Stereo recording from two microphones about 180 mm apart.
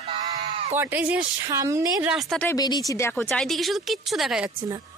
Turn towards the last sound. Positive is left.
turn(degrees=0)  # may be behind; listen again after turning